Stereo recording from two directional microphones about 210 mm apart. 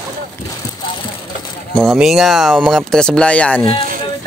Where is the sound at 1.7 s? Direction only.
Centre (ahead or behind).